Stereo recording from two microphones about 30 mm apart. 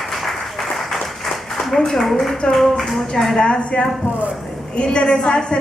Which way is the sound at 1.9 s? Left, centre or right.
Centre.